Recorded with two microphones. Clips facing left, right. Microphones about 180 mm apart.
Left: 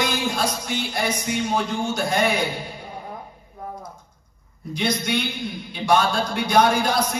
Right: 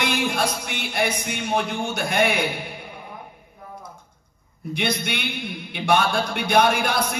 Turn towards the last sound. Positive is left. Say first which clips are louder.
# left 1 dB
turn(degrees=-60)  # may be behind; listen again after turning